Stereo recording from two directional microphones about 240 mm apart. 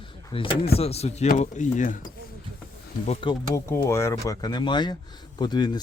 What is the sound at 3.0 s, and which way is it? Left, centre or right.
Speech, left.